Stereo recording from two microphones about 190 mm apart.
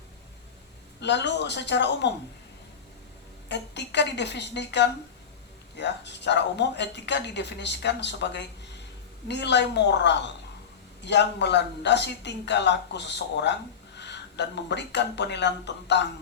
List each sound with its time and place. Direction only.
0.9 s speech: 65° left (ahead or behind)
3.5 s speech: 65° left (ahead or behind)